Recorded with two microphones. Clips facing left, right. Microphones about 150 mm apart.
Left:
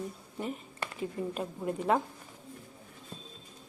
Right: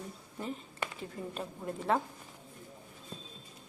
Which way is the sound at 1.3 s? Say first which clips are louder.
Left 5 dB; 5° left (ahead or behind).